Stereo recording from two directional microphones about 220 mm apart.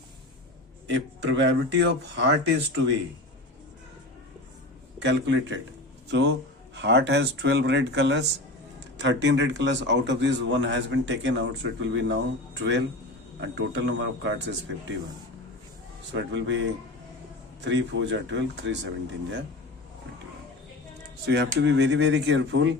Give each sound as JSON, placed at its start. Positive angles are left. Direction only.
{"t": 0.9, "sound": "speech", "side_deg": -55}
{"t": 4.9, "sound": "a man's voice", "side_deg": -55}
{"t": 16.1, "sound": "a man's voice", "side_deg": -55}
{"t": 21.2, "sound": "speech", "side_deg": -50}